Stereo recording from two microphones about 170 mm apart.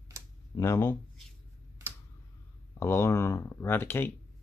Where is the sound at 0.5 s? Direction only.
20° left (ahead or behind).